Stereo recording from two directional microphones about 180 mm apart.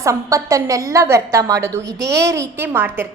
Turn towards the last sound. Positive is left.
turn(degrees=-10)  # may be behind; listen again after turning